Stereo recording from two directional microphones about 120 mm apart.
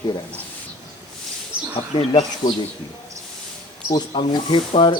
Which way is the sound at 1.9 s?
55° left (ahead or behind).